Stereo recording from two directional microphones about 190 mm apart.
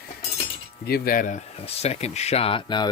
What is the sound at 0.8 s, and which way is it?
Speech, 50° left (ahead or behind).